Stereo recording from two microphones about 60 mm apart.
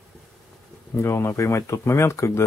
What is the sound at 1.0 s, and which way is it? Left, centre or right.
Speech, left.